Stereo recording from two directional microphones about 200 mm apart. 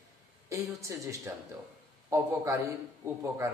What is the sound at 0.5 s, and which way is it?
A man's voice, 15° right (ahead or behind).